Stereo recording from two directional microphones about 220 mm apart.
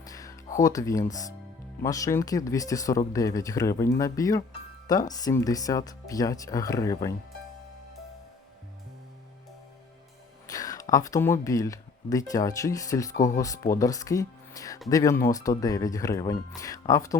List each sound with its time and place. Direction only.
0.0 s music: 15° left (ahead or behind)
0.6 s speech: 15° left (ahead or behind)
10.5 s a sound: 15° left (ahead or behind)
10.9 s speech: 15° left (ahead or behind)